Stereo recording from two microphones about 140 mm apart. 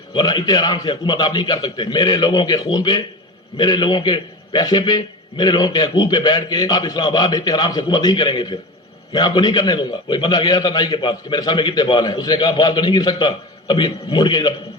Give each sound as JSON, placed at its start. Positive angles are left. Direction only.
{"t": 0.1, "sound": "a man's voice", "side_deg": 35}